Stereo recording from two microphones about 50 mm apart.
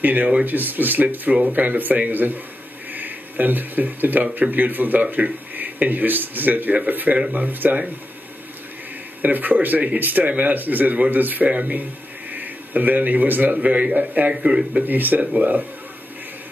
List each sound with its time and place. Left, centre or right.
0.0 s speech: right
7.4 s speech: right
9.2 s a man's voice: right
14.3 s speech: centre
14.8 s speech: right